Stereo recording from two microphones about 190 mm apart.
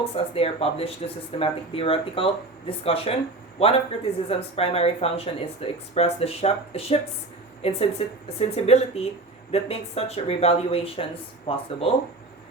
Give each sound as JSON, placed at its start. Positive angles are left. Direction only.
{"t": 0.0, "sound": "speech", "side_deg": 30}